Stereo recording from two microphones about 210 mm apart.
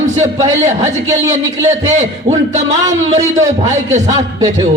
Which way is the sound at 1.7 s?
35° right (ahead or behind).